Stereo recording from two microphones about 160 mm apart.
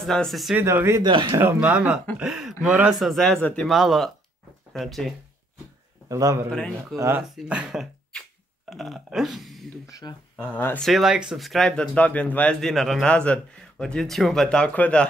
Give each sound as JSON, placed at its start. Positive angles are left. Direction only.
{"t": 0.0, "sound": "speech", "side_deg": 0}
{"t": 0.6, "sound": "speech", "side_deg": -15}
{"t": 1.0, "sound": "speech", "side_deg": -30}
{"t": 1.3, "sound": "speech", "side_deg": -10}
{"t": 6.0, "sound": "a man's voice", "side_deg": -20}
{"t": 6.5, "sound": "speech", "side_deg": 5}
{"t": 7.0, "sound": "speech", "side_deg": -15}
{"t": 9.8, "sound": "speech", "side_deg": 20}
{"t": 10.3, "sound": "speech", "side_deg": 10}
{"t": 10.9, "sound": "speech", "side_deg": 0}